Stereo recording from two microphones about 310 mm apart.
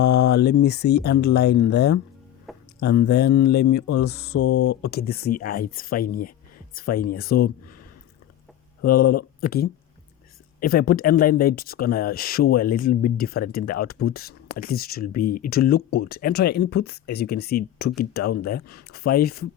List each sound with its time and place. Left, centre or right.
0.0 s speech: left
2.5 s music: centre
3.1 s speech: left
4.4 s speech: left
4.9 s speech: left
9.1 s speech: left